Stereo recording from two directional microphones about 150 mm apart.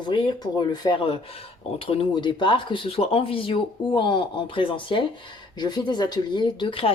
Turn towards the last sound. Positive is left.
turn(degrees=35)  # may be behind; listen again after turning